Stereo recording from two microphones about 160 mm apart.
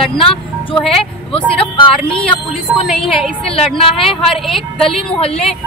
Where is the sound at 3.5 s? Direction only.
35° left (ahead or behind).